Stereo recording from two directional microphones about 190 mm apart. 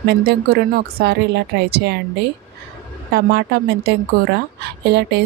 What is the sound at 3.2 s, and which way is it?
Speech, 60° right (ahead or behind).